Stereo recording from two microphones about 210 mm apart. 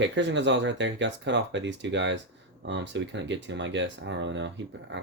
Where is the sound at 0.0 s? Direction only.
60° right (ahead or behind).